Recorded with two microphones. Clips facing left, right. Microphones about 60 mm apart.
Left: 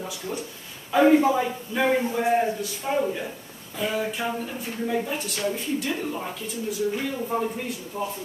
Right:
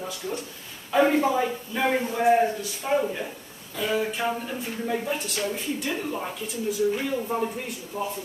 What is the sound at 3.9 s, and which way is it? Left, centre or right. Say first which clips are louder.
Speech: right 3 dB; centre.